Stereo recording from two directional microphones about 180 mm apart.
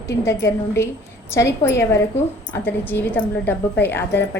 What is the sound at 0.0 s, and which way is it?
A woman's voice, 15° left (ahead or behind).